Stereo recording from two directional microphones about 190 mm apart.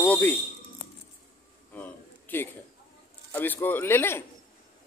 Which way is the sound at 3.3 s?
10° left (ahead or behind).